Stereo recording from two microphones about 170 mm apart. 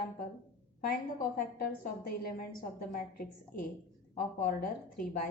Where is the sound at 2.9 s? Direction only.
60° left (ahead or behind).